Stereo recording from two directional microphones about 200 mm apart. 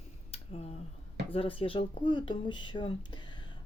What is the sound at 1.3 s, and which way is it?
Speech, 25° left (ahead or behind).